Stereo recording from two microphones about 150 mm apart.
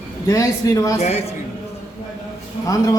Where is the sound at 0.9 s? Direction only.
45° left (ahead or behind).